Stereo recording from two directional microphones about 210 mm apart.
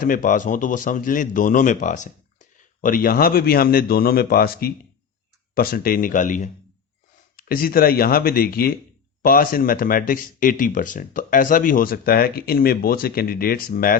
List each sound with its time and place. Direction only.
0.0 s speech: 40° left (ahead or behind)